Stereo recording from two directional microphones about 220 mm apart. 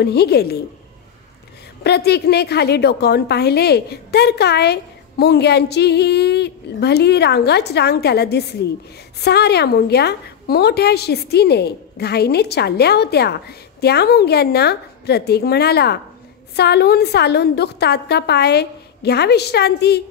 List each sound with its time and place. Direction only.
0.0 s a woman's voice: 45° left (ahead or behind)
1.8 s a woman's voice: 50° left (ahead or behind)